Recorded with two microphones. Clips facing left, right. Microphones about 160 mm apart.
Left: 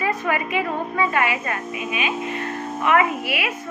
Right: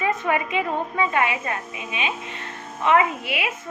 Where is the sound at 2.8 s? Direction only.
20° right (ahead or behind).